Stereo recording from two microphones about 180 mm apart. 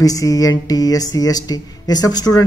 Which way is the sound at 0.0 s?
20° left (ahead or behind).